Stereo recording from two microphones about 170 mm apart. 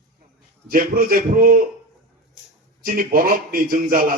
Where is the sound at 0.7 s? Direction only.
60° right (ahead or behind).